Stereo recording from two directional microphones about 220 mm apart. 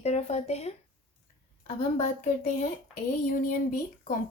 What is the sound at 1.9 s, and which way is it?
Speech, 30° left (ahead or behind).